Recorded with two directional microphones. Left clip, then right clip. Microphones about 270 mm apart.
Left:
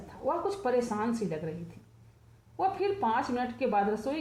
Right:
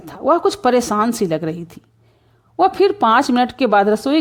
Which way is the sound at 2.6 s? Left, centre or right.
Right.